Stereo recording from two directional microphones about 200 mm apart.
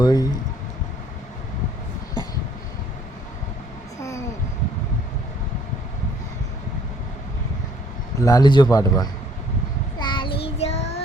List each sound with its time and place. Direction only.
0.0 s a man's voice: 20° left (ahead or behind)
8.2 s a man's voice: 20° left (ahead or behind)
10.0 s child singing: 25° left (ahead or behind)